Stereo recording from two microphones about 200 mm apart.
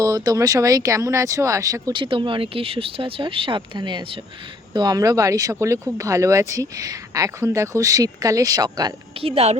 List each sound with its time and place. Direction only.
0.0 s speech: 15° right (ahead or behind)